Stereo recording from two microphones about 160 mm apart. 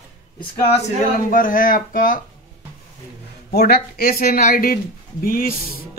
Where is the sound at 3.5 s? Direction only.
75° left (ahead or behind).